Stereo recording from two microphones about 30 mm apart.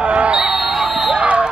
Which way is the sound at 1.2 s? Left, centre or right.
Right.